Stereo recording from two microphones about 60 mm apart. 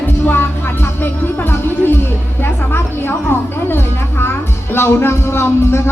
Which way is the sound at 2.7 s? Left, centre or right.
Left.